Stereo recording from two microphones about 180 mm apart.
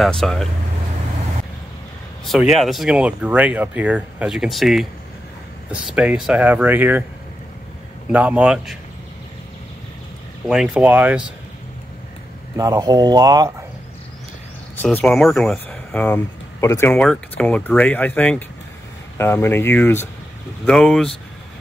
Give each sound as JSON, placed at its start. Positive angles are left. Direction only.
{"t": 0.0, "sound": "speech", "side_deg": 0}
{"t": 2.4, "sound": "speech", "side_deg": 0}
{"t": 8.1, "sound": "speech", "side_deg": -10}
{"t": 10.5, "sound": "speech", "side_deg": -5}
{"t": 12.5, "sound": "speech", "side_deg": -20}
{"t": 15.0, "sound": "speech", "side_deg": 5}